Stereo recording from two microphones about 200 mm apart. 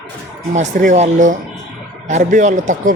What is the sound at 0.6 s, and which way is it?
Speech, 35° right (ahead or behind).